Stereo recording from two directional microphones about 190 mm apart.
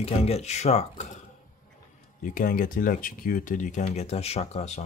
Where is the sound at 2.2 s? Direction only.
45° left (ahead or behind).